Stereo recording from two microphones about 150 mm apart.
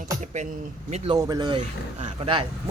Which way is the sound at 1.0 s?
25° right (ahead or behind).